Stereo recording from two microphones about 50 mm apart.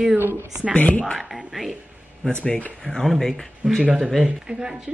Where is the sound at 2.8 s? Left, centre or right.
Centre.